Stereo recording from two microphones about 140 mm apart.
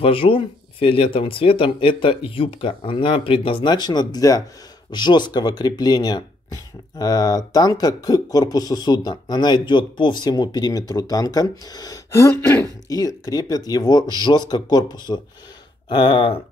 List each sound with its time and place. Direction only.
0.0 s speech: 40° left (ahead or behind)